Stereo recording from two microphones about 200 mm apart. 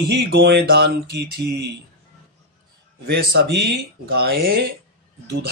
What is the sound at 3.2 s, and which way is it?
Speech, 55° right (ahead or behind).